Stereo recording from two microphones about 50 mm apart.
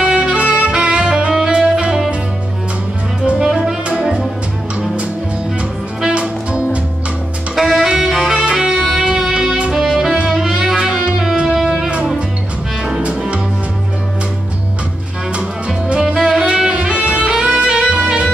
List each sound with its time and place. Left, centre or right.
0.0 s saxophone: centre
3.4 s saxophone: centre
5.9 s music: centre
7.5 s saxophone: centre
7.9 s music: centre
13.0 s music: right
16.0 s music: centre; by 17.3 s right
17.4 s saxophone: right